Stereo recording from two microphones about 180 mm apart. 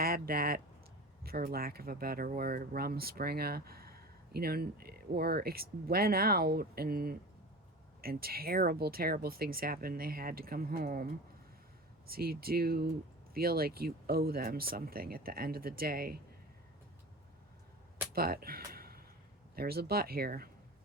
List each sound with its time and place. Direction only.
0.0 s speech: 55° right (ahead or behind)
12.1 s speech: 55° right (ahead or behind)
18.1 s speech: 55° right (ahead or behind)